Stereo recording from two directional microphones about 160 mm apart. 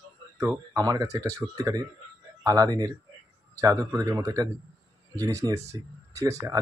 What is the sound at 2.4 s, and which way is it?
Speech, 20° right (ahead or behind).